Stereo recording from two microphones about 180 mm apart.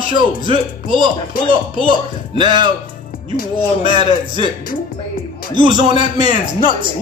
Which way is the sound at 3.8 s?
25° right (ahead or behind).